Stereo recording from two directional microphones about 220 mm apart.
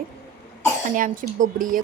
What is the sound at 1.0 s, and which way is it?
Speech, 35° right (ahead or behind).